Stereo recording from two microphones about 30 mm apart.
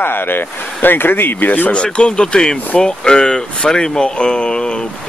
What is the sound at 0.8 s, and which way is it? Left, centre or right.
Speech, left.